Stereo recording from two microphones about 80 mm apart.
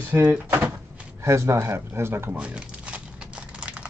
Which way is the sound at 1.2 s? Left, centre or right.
Right.